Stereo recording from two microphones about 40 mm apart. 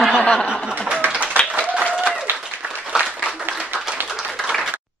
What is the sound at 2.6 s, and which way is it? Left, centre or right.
Applause, right.